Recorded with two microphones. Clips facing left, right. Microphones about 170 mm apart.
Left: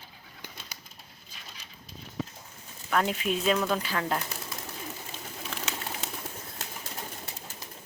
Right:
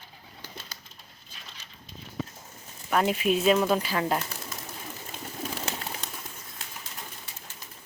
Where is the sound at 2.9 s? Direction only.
15° right (ahead or behind).